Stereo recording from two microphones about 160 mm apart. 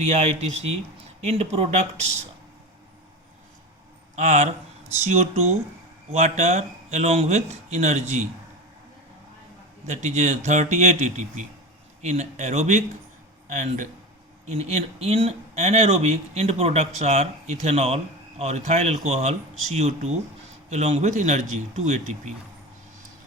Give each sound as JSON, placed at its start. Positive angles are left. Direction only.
{"t": 0.1, "sound": "speech", "side_deg": -40}
{"t": 4.2, "sound": "a man's voice", "side_deg": -45}
{"t": 9.8, "sound": "a man's voice", "side_deg": -45}